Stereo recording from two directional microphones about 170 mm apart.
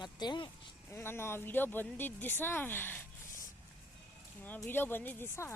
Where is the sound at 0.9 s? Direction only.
15° left (ahead or behind).